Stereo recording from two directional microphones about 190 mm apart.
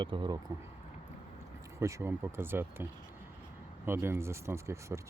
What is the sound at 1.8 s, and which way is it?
Speech, 15° right (ahead or behind).